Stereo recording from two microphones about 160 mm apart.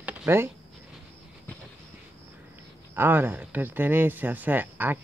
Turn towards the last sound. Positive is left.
turn(degrees=-10)  # may be behind; listen again after turning